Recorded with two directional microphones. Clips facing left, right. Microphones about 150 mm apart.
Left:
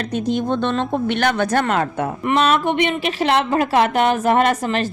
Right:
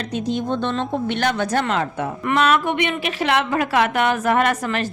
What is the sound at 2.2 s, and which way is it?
A woman's voice, 25° left (ahead or behind).